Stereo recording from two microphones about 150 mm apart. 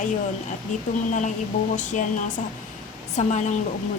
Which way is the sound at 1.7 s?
55° left (ahead or behind).